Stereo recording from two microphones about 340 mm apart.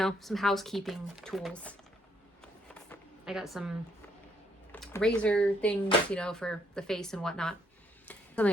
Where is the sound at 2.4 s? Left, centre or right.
Centre.